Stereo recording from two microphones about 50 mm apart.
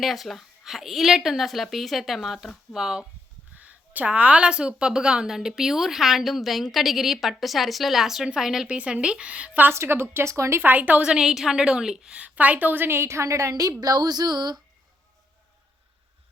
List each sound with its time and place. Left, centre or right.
0.0 s a woman's voice: centre
3.5 s a woman's voice: right; by 8.6 s centre
8.6 s speech: right
9.7 s a woman's voice: right
10.6 s a woman's voice: right
11.0 s a woman's voice: centre
11.3 s a woman's voice: centre
12.2 s a woman's voice: right
13.0 s a woman's voice: right